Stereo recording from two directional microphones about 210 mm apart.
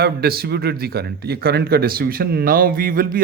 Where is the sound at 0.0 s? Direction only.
50° right (ahead or behind).